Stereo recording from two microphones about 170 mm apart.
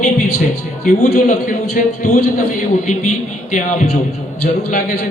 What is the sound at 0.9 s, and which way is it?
Speech, 50° left (ahead or behind).